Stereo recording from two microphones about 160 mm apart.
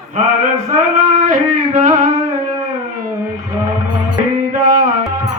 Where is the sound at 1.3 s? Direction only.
50° right (ahead or behind).